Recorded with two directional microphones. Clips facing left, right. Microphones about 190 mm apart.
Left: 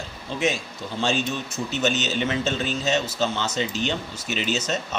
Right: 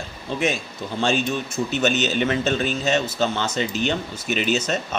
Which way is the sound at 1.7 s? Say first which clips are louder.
Right 2 dB; 60° right (ahead or behind).